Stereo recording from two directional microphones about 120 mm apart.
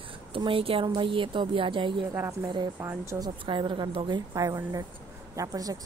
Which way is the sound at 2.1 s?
30° right (ahead or behind).